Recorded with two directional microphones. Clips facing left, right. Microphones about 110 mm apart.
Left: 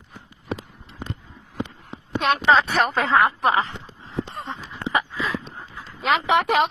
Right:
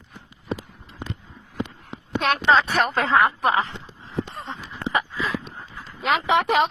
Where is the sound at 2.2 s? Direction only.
Centre (ahead or behind).